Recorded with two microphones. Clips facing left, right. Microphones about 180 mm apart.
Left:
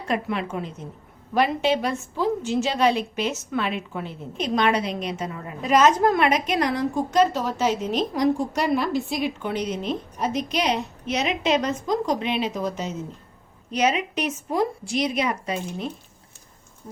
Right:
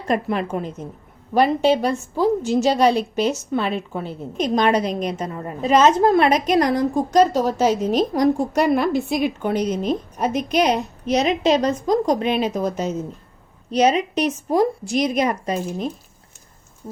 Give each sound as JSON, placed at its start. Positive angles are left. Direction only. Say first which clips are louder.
{"t": 0.1, "sound": "a woman's voice", "louder": "right 5 dB", "side_deg": -40}
{"t": 1.3, "sound": "a woman's voice", "louder": "right 5 dB", "side_deg": -35}
{"t": 5.6, "sound": "a woman's voice", "louder": "right 3 dB", "side_deg": -30}